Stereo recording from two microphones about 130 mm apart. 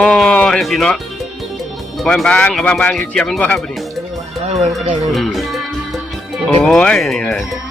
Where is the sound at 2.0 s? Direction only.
5° left (ahead or behind).